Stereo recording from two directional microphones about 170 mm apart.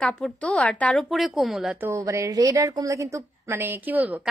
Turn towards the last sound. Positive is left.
turn(degrees=-10)  # may be behind; listen again after turning